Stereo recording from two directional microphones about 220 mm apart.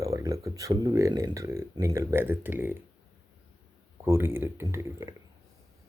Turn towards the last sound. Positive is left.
turn(degrees=-10)  # may be behind; listen again after turning